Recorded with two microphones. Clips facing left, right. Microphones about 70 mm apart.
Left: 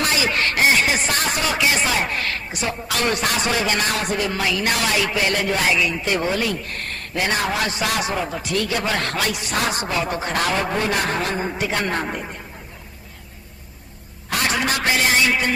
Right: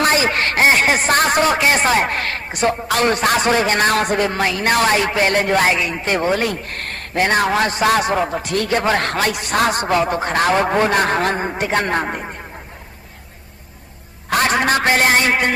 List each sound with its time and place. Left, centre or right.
0.0 s speech: right
14.3 s speech: right